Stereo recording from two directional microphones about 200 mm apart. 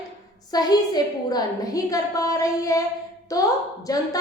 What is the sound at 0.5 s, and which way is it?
A woman's voice, 20° left (ahead or behind).